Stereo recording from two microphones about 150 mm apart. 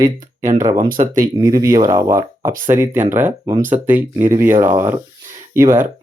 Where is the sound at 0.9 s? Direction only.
65° right (ahead or behind).